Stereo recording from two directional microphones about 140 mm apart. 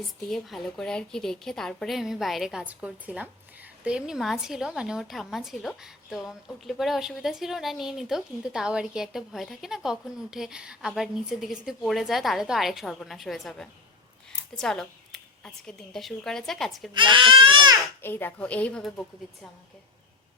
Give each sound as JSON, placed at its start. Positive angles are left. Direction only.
{"t": 0.3, "sound": "a woman's voice", "side_deg": 0}
{"t": 16.9, "sound": "speech", "side_deg": -35}
{"t": 18.0, "sound": "a woman's voice", "side_deg": 15}